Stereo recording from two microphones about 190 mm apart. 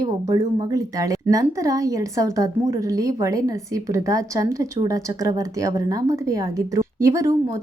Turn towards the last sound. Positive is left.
turn(degrees=-15)  # may be behind; listen again after turning